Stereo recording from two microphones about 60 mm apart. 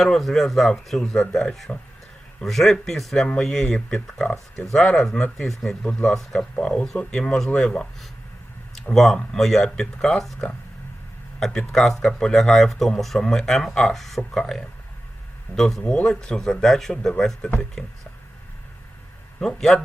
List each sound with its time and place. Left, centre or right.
0.0 s a man's voice: centre
11.3 s speech: centre
15.8 s speech: centre
19.4 s speech: centre